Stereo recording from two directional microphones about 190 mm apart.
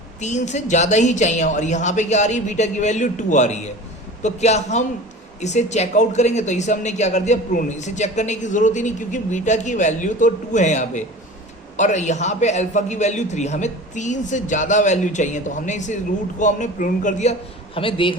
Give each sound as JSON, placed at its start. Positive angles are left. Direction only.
{"t": 0.2, "sound": "speech", "side_deg": 40}
{"t": 17.7, "sound": "a man's voice", "side_deg": 25}